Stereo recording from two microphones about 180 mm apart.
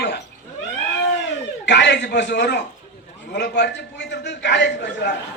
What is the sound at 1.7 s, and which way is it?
A man's voice, 70° left (ahead or behind).